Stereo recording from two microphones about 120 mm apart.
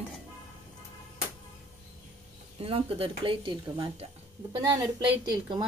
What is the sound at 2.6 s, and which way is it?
Speech, 55° right (ahead or behind).